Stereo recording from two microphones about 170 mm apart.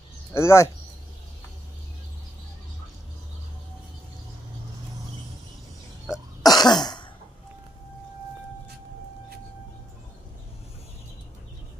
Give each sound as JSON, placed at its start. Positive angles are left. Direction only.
{"t": 0.3, "sound": "speech", "side_deg": 15}
{"t": 6.4, "sound": "cough", "side_deg": 25}